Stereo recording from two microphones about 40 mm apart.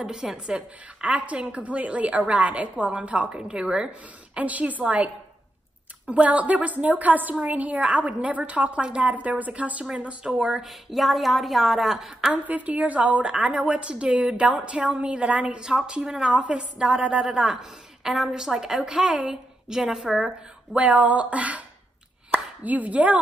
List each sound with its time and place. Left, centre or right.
0.0 s a woman's voice: centre
1.0 s a woman's voice: right
4.4 s a woman's voice: right
10.6 s a woman's voice: centre
12.4 s a woman's voice: right
15.7 s a woman's voice: centre
20.7 s a woman's voice: right
22.3 s plop: right